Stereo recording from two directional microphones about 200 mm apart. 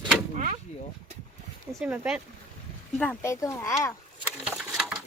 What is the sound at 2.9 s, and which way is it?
Speech, 10° left (ahead or behind).